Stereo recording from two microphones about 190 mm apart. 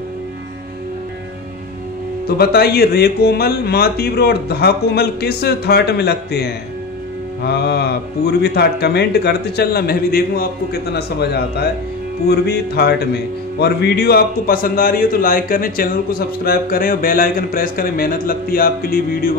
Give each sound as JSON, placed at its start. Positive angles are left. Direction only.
{"t": 2.2, "sound": "speech", "side_deg": 55}